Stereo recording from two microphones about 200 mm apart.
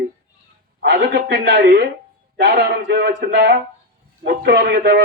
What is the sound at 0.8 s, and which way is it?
A man's voice, 55° right (ahead or behind).